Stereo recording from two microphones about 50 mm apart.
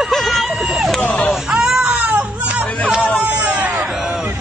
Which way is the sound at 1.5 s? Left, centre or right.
Centre.